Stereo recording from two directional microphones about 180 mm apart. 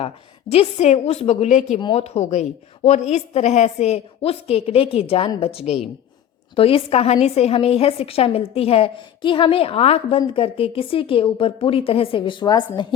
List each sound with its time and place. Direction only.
0.0 s a woman's voice: 35° left (ahead or behind)